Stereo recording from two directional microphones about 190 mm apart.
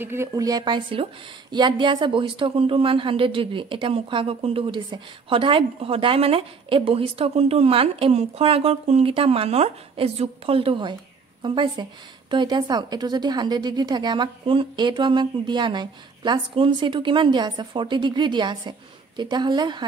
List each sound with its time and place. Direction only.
0.0 s speech: 15° right (ahead or behind)